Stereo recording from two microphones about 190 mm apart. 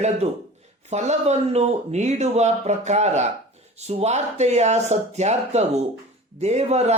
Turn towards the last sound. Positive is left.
turn(degrees=-35)  # may be behind; listen again after turning